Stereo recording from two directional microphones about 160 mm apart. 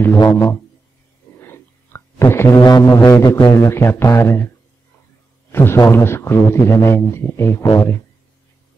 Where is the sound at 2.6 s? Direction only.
25° left (ahead or behind).